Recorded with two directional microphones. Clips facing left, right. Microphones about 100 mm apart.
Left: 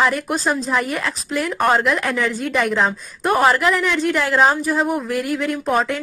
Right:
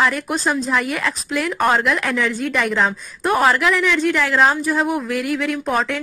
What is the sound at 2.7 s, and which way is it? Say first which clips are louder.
Speech: even; centre (ahead or behind).